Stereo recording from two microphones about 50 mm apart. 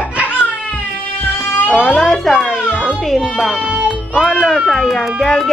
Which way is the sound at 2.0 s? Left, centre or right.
Centre.